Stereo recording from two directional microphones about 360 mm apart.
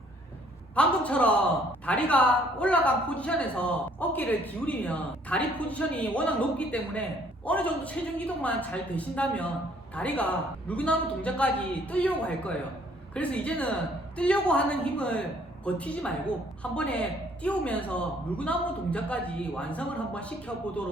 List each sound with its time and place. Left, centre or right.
0.8 s speech: centre